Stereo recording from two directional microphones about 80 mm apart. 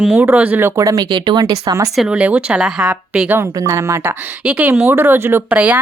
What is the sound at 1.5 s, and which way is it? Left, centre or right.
Speech, right.